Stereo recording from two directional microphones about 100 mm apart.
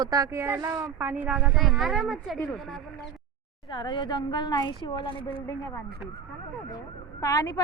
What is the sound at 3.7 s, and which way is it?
A woman's voice, 50° left (ahead or behind).